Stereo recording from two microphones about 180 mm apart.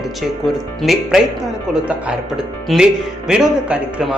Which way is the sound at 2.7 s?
Centre (ahead or behind).